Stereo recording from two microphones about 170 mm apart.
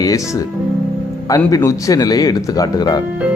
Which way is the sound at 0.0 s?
20° left (ahead or behind).